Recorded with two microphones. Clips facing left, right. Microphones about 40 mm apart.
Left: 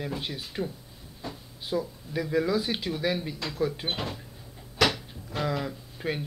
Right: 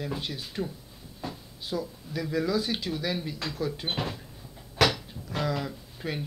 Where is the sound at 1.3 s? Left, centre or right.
Centre.